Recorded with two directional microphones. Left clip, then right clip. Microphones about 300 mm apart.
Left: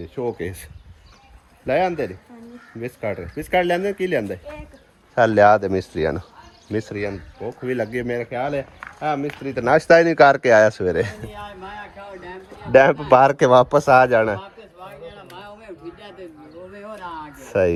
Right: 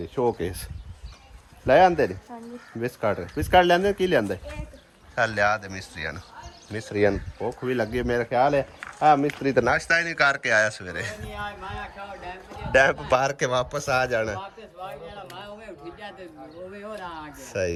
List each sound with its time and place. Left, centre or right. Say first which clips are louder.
0.2 s speech: right 1 dB; centre
1.6 s speech: right 3 dB; centre
5.1 s a man's voice: left 9 dB; centre
7.4 s speech: left 2 dB; centre
9.8 s a man's voice: left 9 dB; centre
12.7 s a sound: left 7 dB; centre
16.7 s a man's voice: left 4 dB; centre